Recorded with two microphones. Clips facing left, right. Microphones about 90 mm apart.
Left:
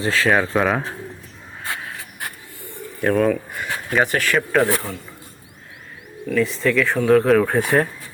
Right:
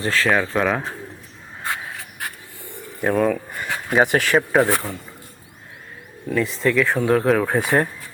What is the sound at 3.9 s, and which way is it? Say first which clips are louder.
Speech: right 2 dB; 20° right (ahead or behind).